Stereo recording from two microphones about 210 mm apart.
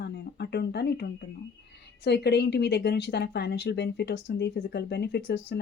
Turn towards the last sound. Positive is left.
turn(degrees=55)  # may be behind; listen again after turning